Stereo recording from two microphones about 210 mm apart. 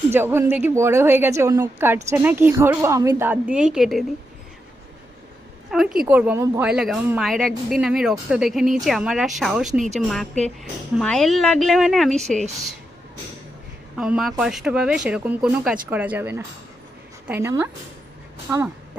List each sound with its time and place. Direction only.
0.1 s a woman's voice: 10° right (ahead or behind)
5.7 s speech: centre (ahead or behind)
10.9 s speech: centre (ahead or behind)
13.9 s a woman's voice: centre (ahead or behind)